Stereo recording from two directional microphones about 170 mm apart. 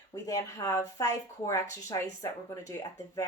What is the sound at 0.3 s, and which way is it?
Speech, 20° left (ahead or behind).